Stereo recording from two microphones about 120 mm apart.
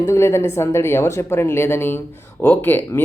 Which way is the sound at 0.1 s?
20° left (ahead or behind).